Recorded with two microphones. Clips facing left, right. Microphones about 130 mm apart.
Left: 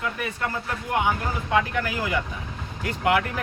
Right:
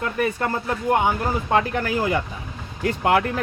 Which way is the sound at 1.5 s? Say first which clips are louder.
Right 2 dB; 40° right (ahead or behind).